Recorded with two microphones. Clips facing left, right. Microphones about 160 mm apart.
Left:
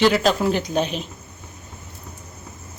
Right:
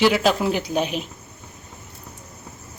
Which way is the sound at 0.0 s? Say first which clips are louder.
Left 1 dB; 5° right (ahead or behind).